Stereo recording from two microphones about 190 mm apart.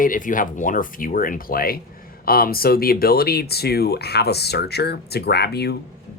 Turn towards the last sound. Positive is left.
turn(degrees=60)  # may be behind; listen again after turning